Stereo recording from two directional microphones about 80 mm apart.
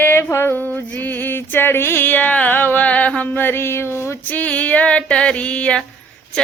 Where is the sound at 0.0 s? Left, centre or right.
Left.